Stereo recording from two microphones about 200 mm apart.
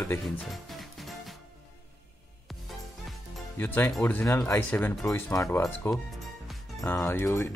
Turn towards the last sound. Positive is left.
turn(degrees=10)  # may be behind; listen again after turning